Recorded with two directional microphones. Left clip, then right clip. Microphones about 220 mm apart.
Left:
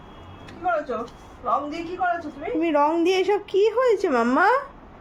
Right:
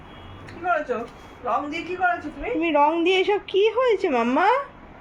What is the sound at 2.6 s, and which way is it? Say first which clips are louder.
A woman's voice: right 1 dB; 10° left (ahead or behind).